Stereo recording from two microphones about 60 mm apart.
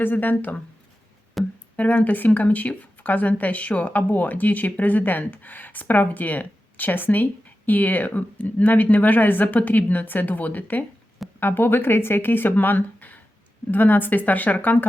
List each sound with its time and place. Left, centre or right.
0.0 s speech: left
1.4 s speech: centre
1.7 s speech: left